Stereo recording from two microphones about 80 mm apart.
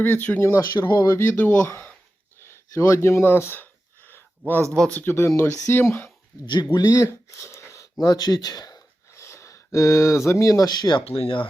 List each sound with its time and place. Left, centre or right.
0.0 s speech: left
1.1 s speech: left
2.4 s a sound: left
4.7 s speech: centre
5.0 s speech: left
6.4 s speech: left
6.7 s speech: left
7.1 s a sound: left
8.0 s a sound: left
9.2 s speech: left